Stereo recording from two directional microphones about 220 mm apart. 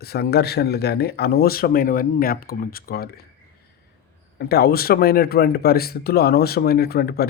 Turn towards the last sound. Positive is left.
turn(degrees=45)  # may be behind; listen again after turning